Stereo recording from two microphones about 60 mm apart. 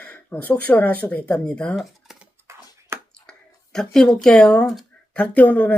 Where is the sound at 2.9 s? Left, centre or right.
Right.